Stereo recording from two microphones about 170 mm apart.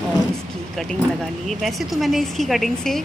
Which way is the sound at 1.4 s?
Centre (ahead or behind).